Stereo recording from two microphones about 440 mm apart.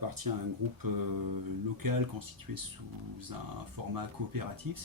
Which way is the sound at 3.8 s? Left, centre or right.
Right.